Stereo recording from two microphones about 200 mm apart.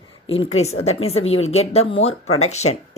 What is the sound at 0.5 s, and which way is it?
Speech, 30° left (ahead or behind).